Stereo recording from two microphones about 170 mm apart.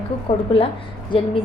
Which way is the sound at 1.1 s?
30° left (ahead or behind).